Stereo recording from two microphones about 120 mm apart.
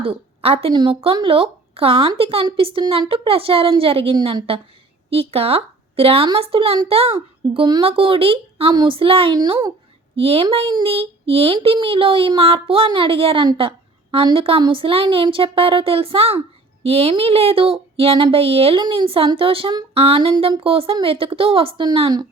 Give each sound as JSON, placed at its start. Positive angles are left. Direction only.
{"t": 0.0, "sound": "a woman's voice", "side_deg": -50}
{"t": 0.7, "sound": "a child's voice", "side_deg": -40}
{"t": 10.2, "sound": "speech", "side_deg": -50}